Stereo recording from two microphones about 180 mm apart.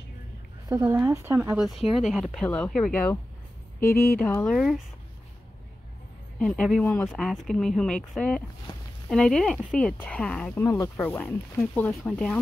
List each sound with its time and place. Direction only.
0.7 s speech: 15° right (ahead or behind)
2.0 s speech: centre (ahead or behind)
4.2 s speech: 10° left (ahead or behind)
4.6 s speech: centre (ahead or behind)
6.4 s speech: 5° left (ahead or behind)